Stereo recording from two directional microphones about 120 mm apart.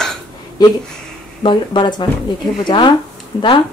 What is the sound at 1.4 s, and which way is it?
Speech, 40° left (ahead or behind).